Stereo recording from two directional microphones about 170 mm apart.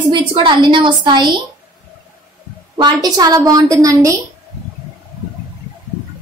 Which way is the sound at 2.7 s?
25° right (ahead or behind).